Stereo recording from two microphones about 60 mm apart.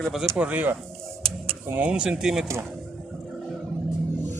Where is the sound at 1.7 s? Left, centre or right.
Right.